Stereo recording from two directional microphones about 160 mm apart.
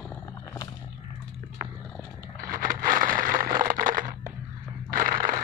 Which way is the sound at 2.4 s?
60° right (ahead or behind).